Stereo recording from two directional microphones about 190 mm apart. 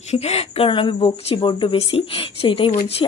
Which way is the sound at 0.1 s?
35° left (ahead or behind).